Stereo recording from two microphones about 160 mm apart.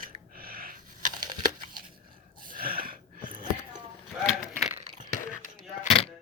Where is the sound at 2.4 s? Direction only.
65° right (ahead or behind).